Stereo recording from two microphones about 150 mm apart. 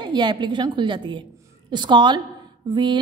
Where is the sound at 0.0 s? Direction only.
30° right (ahead or behind).